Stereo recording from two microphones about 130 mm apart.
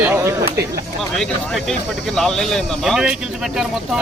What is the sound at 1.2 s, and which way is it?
Speech, 5° left (ahead or behind).